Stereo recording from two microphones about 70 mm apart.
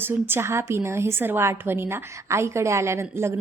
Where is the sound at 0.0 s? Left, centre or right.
Right.